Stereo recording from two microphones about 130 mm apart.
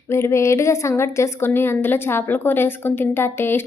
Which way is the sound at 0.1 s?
20° left (ahead or behind).